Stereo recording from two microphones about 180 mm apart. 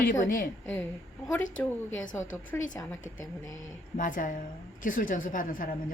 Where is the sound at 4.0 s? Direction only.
45° left (ahead or behind).